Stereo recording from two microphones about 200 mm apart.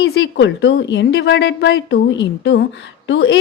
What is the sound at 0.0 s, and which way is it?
A woman's voice, 60° left (ahead or behind).